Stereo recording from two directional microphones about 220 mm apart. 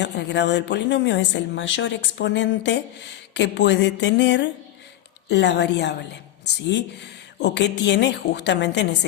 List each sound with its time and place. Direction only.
0.0 s speech: 50° left (ahead or behind)